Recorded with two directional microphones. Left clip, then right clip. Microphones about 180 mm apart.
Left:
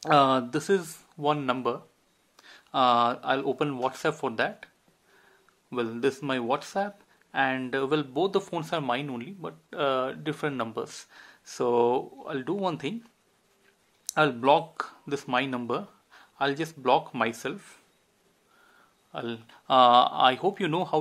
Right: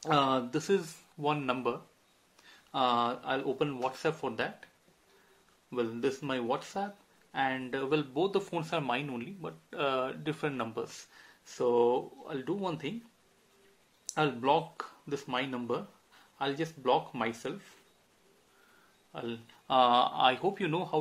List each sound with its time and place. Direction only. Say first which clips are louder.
0.0 s speech: left 7 dB; 35° left (ahead or behind)
5.7 s speech: left 4 dB; 35° left (ahead or behind)
14.0 s speech: left 6 dB; 35° left (ahead or behind)
19.1 s speech: left 5 dB; 35° left (ahead or behind)